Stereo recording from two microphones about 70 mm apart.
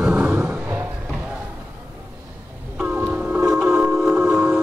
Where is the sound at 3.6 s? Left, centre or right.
Right.